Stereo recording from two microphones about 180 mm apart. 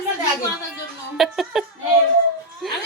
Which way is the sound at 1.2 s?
Centre (ahead or behind).